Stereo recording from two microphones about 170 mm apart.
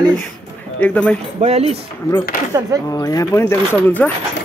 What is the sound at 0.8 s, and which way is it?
Speech, 5° left (ahead or behind).